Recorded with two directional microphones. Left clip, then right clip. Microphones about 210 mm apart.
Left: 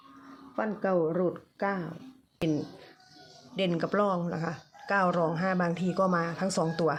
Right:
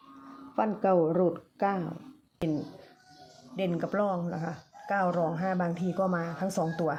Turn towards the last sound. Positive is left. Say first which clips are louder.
# left 2 dB
turn(degrees=15)  # may be behind; listen again after turning